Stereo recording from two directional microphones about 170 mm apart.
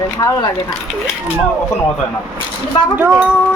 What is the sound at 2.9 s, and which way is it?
Speech, 10° right (ahead or behind).